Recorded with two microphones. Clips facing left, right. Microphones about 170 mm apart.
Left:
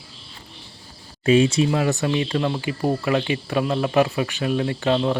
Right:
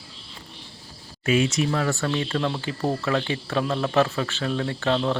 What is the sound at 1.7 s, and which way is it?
Speech, 20° left (ahead or behind).